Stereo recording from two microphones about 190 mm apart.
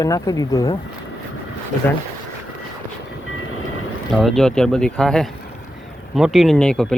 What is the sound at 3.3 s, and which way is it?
Train, 90° left.